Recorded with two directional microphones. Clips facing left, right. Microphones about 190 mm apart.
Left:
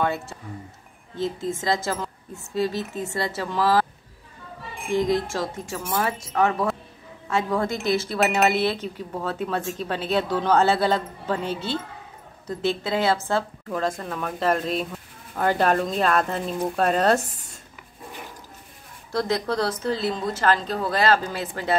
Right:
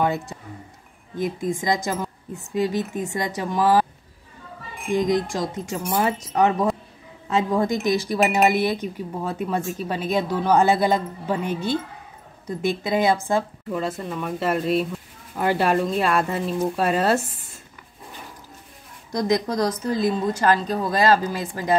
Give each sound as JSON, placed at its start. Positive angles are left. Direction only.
{"t": 0.0, "sound": "speech", "side_deg": -15}
{"t": 4.9, "sound": "speech", "side_deg": -15}
{"t": 19.1, "sound": "speech", "side_deg": -15}